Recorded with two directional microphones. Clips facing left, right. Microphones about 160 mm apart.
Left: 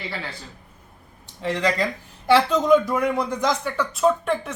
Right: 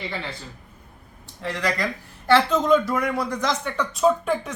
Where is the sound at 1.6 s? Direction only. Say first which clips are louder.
Left 1 dB; 15° left (ahead or behind).